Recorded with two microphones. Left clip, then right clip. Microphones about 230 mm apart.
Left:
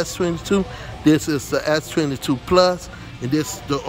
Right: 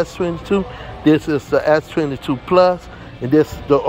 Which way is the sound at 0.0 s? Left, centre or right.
Centre.